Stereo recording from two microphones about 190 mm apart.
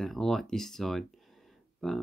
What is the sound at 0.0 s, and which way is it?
Speech, centre (ahead or behind).